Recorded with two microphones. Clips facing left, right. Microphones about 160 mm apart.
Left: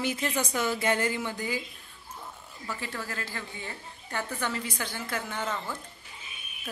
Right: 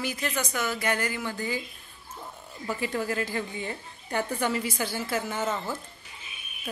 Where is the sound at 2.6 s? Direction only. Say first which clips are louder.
Right 7 dB; 15° right (ahead or behind).